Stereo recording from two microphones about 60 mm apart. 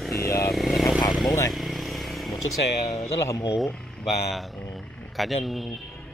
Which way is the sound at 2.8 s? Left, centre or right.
Left.